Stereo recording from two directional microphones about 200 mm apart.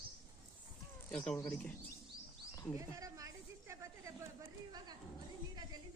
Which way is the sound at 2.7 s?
15° right (ahead or behind).